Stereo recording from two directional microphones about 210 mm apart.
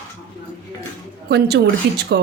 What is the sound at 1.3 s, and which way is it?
Speech, 50° right (ahead or behind).